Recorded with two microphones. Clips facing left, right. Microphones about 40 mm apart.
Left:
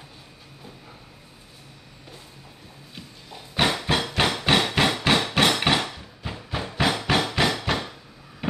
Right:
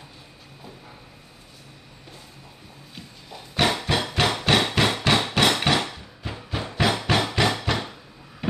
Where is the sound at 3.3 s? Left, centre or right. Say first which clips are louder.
Right 1 dB; centre.